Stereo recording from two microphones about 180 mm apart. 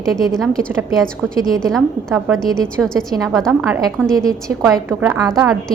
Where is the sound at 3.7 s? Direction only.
20° right (ahead or behind).